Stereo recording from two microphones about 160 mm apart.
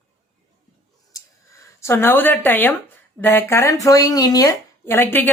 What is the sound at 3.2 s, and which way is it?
A woman's voice, 15° left (ahead or behind).